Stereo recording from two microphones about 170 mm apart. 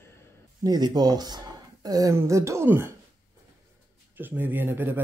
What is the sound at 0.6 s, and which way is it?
Speech, 25° right (ahead or behind).